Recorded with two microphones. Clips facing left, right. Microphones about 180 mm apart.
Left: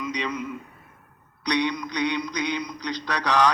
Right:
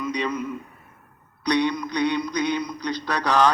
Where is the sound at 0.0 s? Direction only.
50° right (ahead or behind).